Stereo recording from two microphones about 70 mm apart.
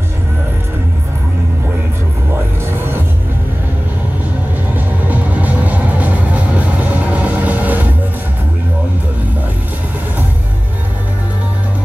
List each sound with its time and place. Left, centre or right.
4.7 s music: right